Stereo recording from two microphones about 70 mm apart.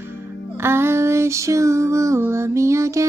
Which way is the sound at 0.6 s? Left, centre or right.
Right.